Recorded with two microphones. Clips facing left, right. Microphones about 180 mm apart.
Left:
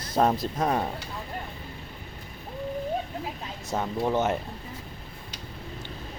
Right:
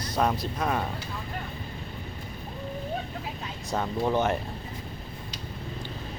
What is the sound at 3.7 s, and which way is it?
Speech, 5° left (ahead or behind).